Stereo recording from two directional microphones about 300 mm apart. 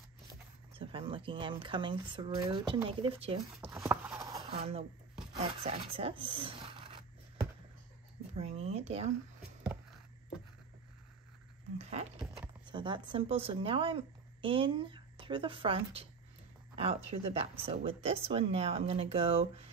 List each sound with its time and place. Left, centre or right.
0.7 s speech: centre
3.6 s clip-clop: centre
4.5 s speech: centre
8.4 s speech: right
11.8 s a sound: right
12.4 s speech: centre